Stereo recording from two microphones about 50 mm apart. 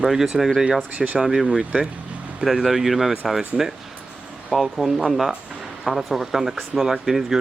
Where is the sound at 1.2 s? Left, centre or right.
Centre.